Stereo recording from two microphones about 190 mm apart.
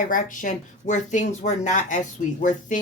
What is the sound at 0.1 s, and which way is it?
Speech, 45° left (ahead or behind).